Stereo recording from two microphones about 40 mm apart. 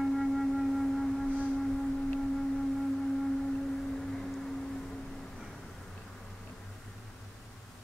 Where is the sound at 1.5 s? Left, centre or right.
Centre.